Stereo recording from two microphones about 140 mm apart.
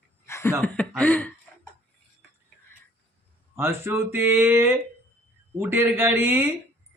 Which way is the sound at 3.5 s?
15° right (ahead or behind).